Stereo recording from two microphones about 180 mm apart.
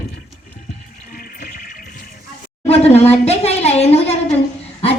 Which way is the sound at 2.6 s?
35° left (ahead or behind).